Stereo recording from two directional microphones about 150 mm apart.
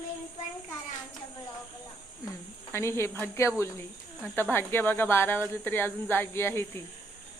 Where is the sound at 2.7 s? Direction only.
15° left (ahead or behind).